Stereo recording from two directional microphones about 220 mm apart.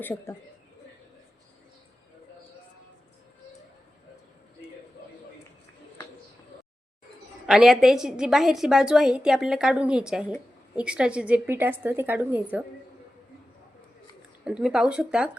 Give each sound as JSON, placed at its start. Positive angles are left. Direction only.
{"t": 0.0, "sound": "speech", "side_deg": 10}
{"t": 7.4, "sound": "a woman's voice", "side_deg": 0}
{"t": 14.4, "sound": "a woman's voice", "side_deg": -5}